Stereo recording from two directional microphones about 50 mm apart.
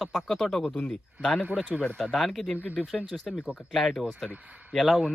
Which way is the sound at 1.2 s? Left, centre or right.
Centre.